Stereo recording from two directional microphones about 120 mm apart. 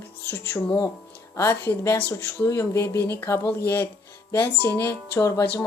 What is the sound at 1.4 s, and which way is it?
Speech, 25° left (ahead or behind).